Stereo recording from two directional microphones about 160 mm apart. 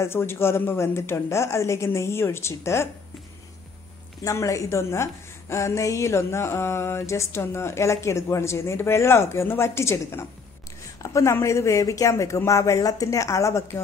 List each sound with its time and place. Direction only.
0.0 s a woman's voice: 15° left (ahead or behind)
4.2 s a woman's voice: 20° left (ahead or behind)